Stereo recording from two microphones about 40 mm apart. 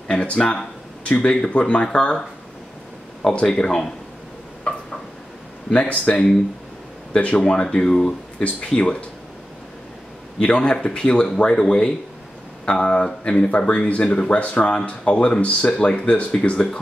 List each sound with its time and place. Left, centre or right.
0.1 s speech: left
3.2 s speech: centre
5.7 s speech: left
10.4 s speech: left
12.6 s speech: left